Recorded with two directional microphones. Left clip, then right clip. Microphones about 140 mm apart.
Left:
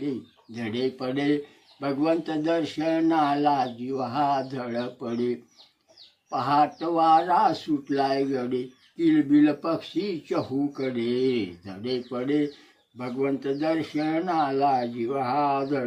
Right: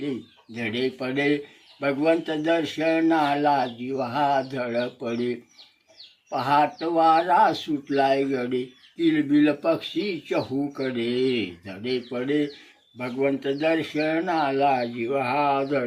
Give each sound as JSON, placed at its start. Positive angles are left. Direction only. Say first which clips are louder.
{"t": 0.6, "sound": "speech", "louder": "right 2 dB", "side_deg": 15}
{"t": 14.3, "sound": "speech", "louder": "even", "side_deg": 15}